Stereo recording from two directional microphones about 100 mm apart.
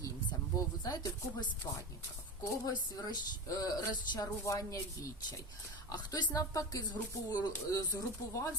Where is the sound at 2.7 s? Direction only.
40° left (ahead or behind).